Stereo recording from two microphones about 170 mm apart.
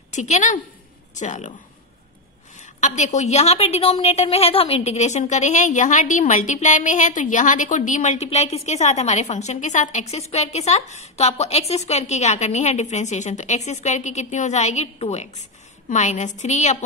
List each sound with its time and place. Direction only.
0.1 s a woman's voice: 45° left (ahead or behind)
2.6 s a woman's voice: 45° left (ahead or behind)